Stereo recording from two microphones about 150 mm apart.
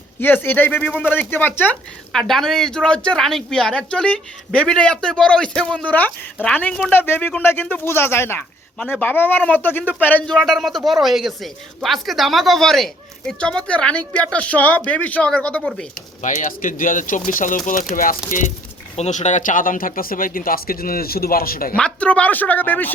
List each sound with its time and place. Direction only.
0.2 s speech: 15° left (ahead or behind)
2.1 s speech: centre (ahead or behind)
10.3 s speech: centre (ahead or behind)
15.6 s speech: centre (ahead or behind)
16.2 s speech: 55° left (ahead or behind)
18.9 s speech: 50° left (ahead or behind); by 21.8 s 75° left (ahead or behind)
21.8 s speech: 5° left (ahead or behind)